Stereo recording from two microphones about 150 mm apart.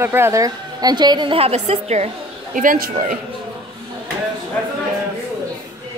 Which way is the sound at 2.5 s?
65° right (ahead or behind).